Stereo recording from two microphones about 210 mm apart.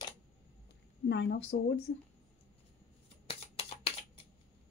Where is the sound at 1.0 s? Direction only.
55° left (ahead or behind).